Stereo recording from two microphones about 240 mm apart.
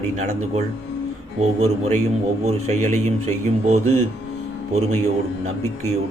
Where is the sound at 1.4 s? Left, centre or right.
Right.